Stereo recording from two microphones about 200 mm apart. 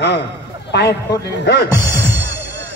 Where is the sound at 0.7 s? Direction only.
55° left (ahead or behind).